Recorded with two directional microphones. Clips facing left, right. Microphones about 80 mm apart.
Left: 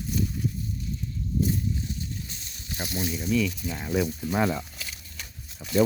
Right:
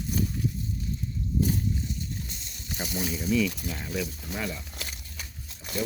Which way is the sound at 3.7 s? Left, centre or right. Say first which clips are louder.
Left 6 dB; centre.